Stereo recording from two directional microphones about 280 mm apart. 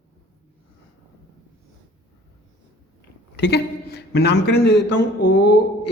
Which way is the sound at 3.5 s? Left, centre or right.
Left.